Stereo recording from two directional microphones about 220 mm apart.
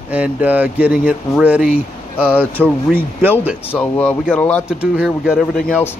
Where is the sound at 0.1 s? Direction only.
5° right (ahead or behind).